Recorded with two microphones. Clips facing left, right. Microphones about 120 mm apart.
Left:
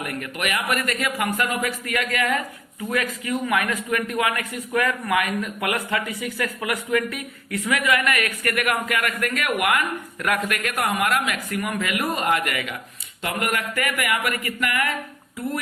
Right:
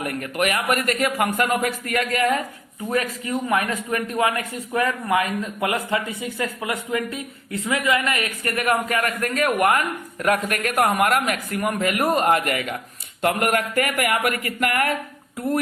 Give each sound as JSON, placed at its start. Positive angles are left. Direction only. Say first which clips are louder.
{"t": 0.0, "sound": "a man's voice", "louder": "right 4 dB", "side_deg": -40}